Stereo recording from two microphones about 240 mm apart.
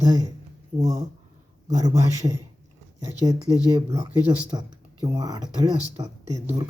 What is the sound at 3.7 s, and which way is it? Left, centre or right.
Speech, centre.